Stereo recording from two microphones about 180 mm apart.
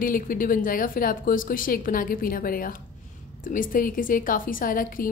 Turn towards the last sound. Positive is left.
turn(degrees=50)  # may be behind; listen again after turning